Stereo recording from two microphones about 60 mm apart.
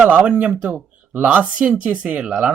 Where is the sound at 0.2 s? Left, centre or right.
Right.